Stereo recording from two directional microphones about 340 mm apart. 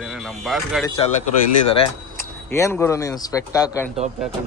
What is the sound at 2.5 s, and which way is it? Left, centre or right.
Speech, centre.